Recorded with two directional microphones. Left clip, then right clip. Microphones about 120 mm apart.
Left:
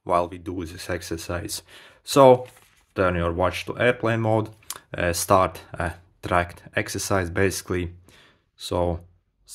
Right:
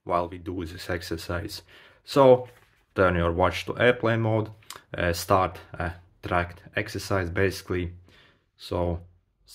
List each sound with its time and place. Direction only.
0.0 s speech: 40° left (ahead or behind); by 1.5 s 25° left (ahead or behind)
1.5 s speech: 45° left (ahead or behind)
2.9 s speech: 10° left (ahead or behind); by 9.0 s 40° left (ahead or behind)